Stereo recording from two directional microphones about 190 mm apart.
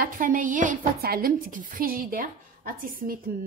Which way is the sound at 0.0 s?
45° right (ahead or behind).